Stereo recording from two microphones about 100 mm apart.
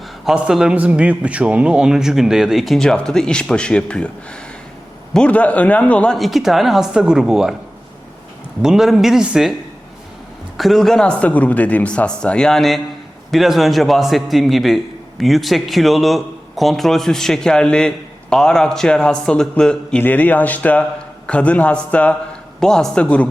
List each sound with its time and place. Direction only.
0.3 s a man's voice: 5° right (ahead or behind); by 6.1 s 15° left (ahead or behind)
6.1 s a man's voice: centre (ahead or behind)
8.6 s a man's voice: 5° right (ahead or behind)
10.6 s a man's voice: centre (ahead or behind)
20.0 s a man's voice: 15° left (ahead or behind)